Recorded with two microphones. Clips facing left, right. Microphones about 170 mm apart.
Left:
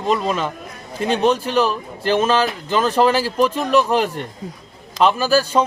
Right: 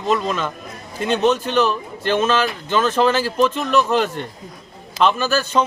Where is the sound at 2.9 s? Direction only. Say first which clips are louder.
Left 1 dB; 10° left (ahead or behind).